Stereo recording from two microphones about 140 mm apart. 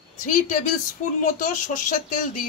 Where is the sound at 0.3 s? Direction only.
70° left (ahead or behind).